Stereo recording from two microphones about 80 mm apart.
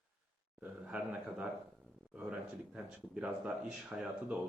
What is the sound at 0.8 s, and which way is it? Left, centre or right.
Speech, centre.